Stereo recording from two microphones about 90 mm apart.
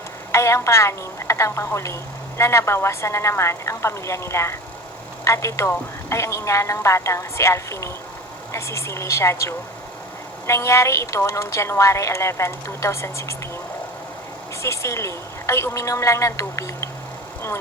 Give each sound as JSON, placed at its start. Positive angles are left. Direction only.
{"t": 0.3, "sound": "a woman's voice", "side_deg": 30}
{"t": 14.6, "sound": "a woman's voice", "side_deg": 30}